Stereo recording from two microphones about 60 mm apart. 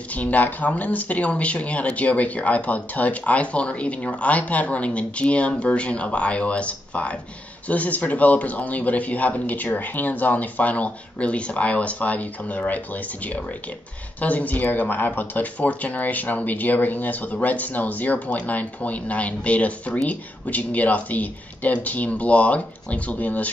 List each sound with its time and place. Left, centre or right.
0.1 s speech: left